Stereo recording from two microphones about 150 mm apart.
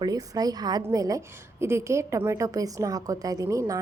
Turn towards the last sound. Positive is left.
turn(degrees=-20)  # may be behind; listen again after turning